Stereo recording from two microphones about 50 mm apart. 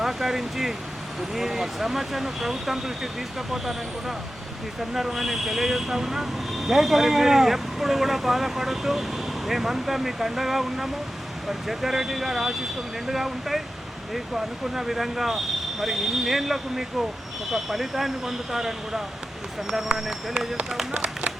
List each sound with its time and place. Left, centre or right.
0.0 s speech: centre
20.9 s speech: right